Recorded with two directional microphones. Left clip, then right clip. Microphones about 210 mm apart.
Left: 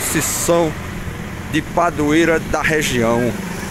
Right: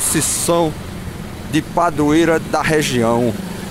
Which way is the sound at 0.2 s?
20° right (ahead or behind).